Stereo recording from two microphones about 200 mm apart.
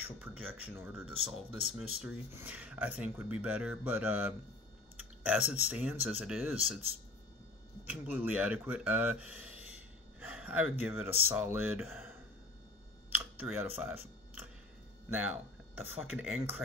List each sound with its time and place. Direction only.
0.5 s speech: 10° right (ahead or behind)
4.9 s typing: 5° right (ahead or behind)
5.7 s speech: 5° right (ahead or behind)
7.8 s speech: 10° right (ahead or behind)
13.2 s a sound: 10° right (ahead or behind)
16.0 s speech: 10° right (ahead or behind)